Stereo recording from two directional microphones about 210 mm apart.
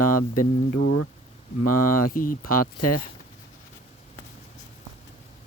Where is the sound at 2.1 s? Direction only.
40° left (ahead or behind).